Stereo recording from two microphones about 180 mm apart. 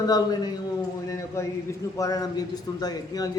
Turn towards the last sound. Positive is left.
turn(degrees=20)  # may be behind; listen again after turning